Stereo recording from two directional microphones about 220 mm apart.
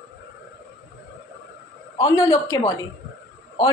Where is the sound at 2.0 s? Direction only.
15° left (ahead or behind).